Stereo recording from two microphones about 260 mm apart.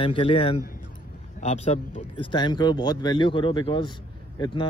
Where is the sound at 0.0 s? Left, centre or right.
Left.